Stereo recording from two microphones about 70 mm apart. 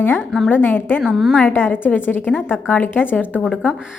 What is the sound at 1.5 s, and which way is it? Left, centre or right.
Speech, left.